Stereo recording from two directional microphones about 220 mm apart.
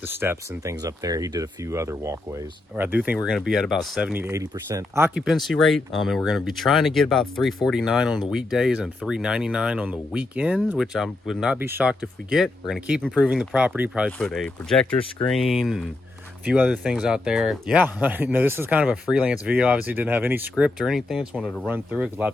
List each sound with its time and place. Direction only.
0.2 s speech: 10° right (ahead or behind)